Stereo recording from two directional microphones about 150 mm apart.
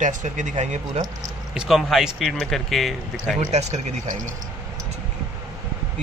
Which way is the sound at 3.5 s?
50° right (ahead or behind).